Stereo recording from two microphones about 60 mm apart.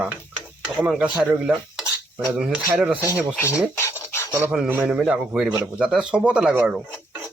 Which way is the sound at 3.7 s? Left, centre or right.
Left.